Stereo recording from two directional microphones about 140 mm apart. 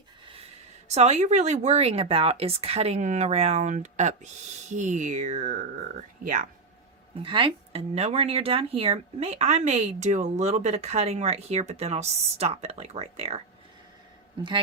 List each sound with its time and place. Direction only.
0.9 s speech: 50° right (ahead or behind)
7.2 s speech: 40° right (ahead or behind)